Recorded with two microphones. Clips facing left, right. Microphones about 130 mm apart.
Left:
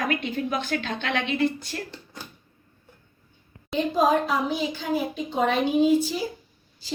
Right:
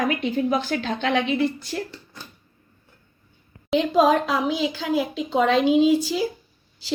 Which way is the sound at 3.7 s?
85° right.